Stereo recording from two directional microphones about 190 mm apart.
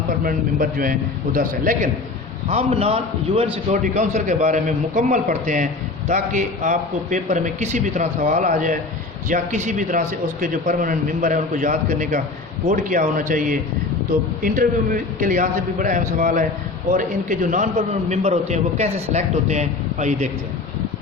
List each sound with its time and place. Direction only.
0.3 s a man's voice: 45° right (ahead or behind)
2.5 s a man's voice: 35° right (ahead or behind)